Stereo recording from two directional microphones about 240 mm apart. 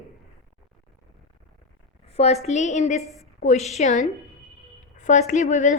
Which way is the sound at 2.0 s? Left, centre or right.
Left.